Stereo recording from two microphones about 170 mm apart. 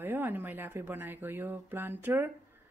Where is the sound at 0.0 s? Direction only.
10° right (ahead or behind).